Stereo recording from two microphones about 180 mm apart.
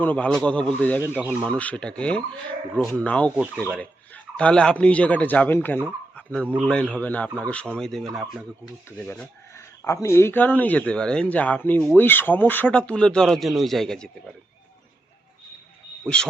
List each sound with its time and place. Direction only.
0.0 s speech: 10° left (ahead or behind)
1.2 s speech: 10° right (ahead or behind)
1.5 s speech: 5° left (ahead or behind)
3.3 s speech: 5° right (ahead or behind)
3.8 s a man's voice: 5° left (ahead or behind)
6.4 s speech: 10° right (ahead or behind)
6.7 s speech: 5° left (ahead or behind)
9.0 s speech: 10° left (ahead or behind)
16.0 s speech: 5° left (ahead or behind)